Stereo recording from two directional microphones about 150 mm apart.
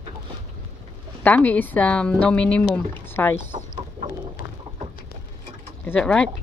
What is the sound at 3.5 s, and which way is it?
Chicken, 65° right (ahead or behind).